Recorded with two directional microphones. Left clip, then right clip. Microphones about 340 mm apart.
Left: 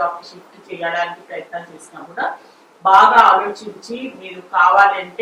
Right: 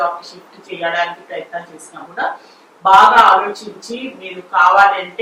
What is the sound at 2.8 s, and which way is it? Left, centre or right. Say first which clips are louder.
Speech: right 2 dB; centre.